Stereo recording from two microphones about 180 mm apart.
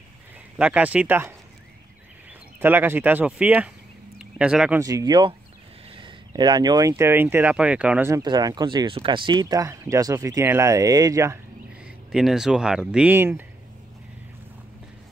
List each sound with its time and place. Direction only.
0.6 s speech: 5° right (ahead or behind)
2.6 s speech: 10° right (ahead or behind)
4.7 s speech: 20° right (ahead or behind)
8.1 s speech: 20° right (ahead or behind)
11.8 s speech: 5° right (ahead or behind)